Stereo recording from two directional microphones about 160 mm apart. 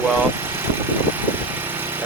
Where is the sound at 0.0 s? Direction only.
15° right (ahead or behind).